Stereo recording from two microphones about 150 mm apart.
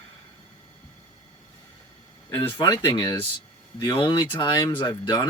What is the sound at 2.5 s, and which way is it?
Speech, 25° left (ahead or behind).